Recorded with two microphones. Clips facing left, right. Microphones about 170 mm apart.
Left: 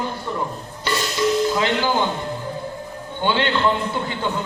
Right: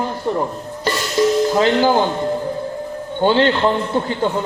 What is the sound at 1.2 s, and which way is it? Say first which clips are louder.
Music: right 5 dB; 35° right (ahead or behind).